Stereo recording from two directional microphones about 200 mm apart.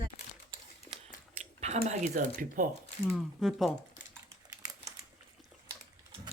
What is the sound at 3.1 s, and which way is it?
Speech, centre (ahead or behind).